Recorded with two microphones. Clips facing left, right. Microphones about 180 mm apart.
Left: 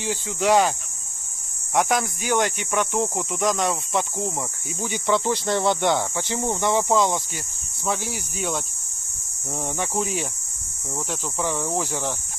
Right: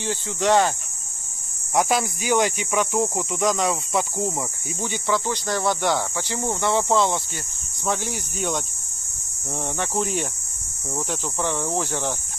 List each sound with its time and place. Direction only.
0.0 s speech: 10° left (ahead or behind)
1.9 s cricket: 10° right (ahead or behind)
4.8 s speech: 15° left (ahead or behind)
5.1 s speech: 25° left (ahead or behind)
7.8 s cricket: centre (ahead or behind)
9.8 s cricket: 5° left (ahead or behind)